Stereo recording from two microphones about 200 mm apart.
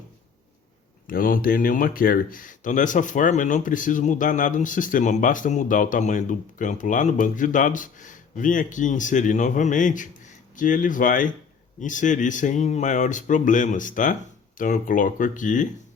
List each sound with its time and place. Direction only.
1.0 s speech: 45° left (ahead or behind)